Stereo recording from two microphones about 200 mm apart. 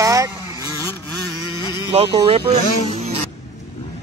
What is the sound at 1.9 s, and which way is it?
Speech, 25° right (ahead or behind).